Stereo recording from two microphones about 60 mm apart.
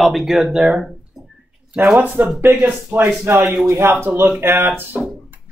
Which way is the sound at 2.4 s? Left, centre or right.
Right.